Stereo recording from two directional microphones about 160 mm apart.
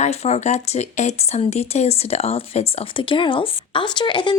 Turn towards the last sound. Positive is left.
turn(degrees=30)  # may be behind; listen again after turning